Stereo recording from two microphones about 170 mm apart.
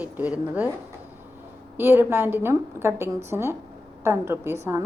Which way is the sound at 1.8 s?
15° right (ahead or behind).